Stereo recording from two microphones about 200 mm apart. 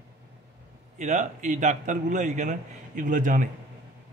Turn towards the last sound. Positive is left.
turn(degrees=-40)  # may be behind; listen again after turning